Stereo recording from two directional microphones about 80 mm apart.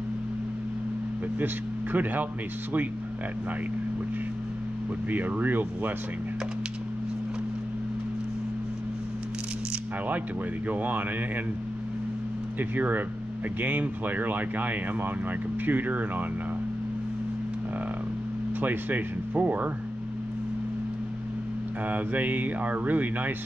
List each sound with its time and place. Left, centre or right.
1.4 s speech: right
5.1 s speech: right
10.7 s speech: right
12.5 s speech: right
18.6 s speech: right
21.8 s speech: right